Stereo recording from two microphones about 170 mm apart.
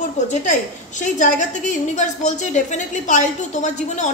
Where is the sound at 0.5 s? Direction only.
45° left (ahead or behind).